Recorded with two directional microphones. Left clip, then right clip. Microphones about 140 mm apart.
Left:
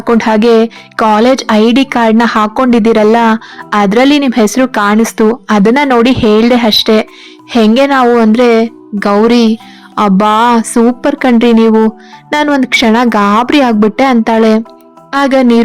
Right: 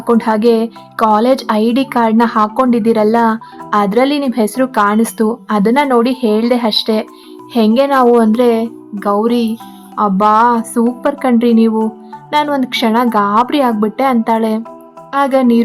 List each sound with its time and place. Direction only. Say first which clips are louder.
0.0 s speech: left 3 dB; 25° left (ahead or behind)